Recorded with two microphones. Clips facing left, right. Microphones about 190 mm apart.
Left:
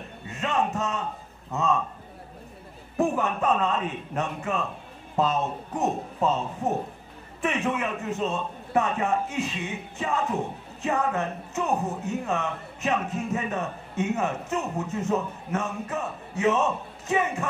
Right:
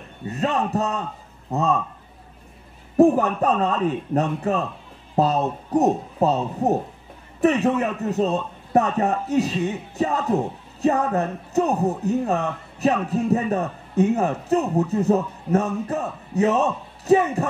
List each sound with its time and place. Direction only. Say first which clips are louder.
0.3 s a man's voice: right 4 dB; 35° right (ahead or behind)
3.0 s a man's voice: right 9 dB; 35° right (ahead or behind)